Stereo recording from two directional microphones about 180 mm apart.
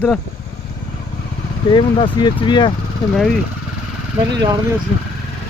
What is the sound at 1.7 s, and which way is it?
Speech, 25° left (ahead or behind).